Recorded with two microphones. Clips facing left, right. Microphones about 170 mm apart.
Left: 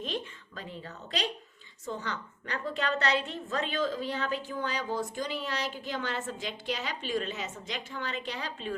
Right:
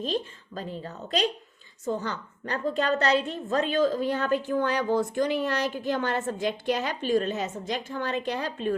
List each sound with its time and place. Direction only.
0.0 s a woman's voice: 35° right (ahead or behind)